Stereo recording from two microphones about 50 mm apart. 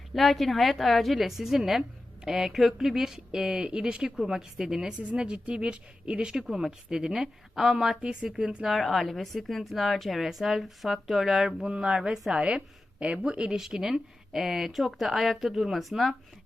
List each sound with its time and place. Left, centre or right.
0.1 s a woman's voice: centre
8.6 s a woman's voice: centre